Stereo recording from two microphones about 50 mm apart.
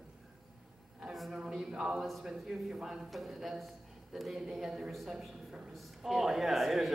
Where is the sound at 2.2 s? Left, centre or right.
Centre.